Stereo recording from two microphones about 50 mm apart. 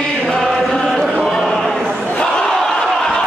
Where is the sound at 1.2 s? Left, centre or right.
Centre.